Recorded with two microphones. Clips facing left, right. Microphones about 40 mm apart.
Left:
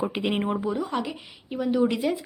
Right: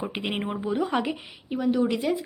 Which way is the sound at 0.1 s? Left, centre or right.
Right.